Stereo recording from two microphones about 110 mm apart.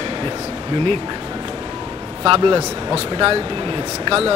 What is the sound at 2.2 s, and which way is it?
Speech, 50° right (ahead or behind).